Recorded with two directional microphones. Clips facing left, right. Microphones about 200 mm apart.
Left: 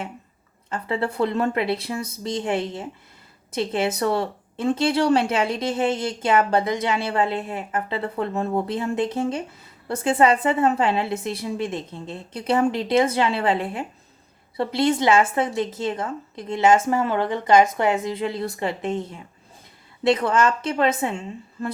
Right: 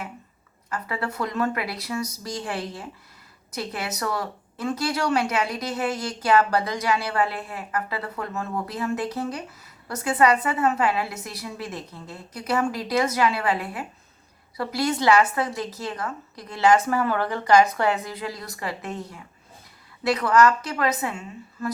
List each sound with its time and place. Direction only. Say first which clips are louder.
0.7 s speech: left 4 dB; 30° left (ahead or behind)